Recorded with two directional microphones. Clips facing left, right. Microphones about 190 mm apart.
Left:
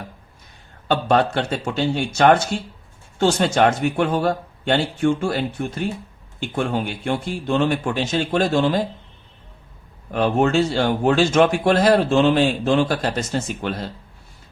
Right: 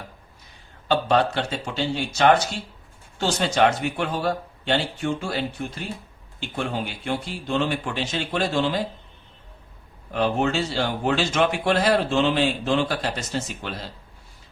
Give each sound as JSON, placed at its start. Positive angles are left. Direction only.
{"t": 0.9, "sound": "speech", "side_deg": 55}
{"t": 10.1, "sound": "speech", "side_deg": 50}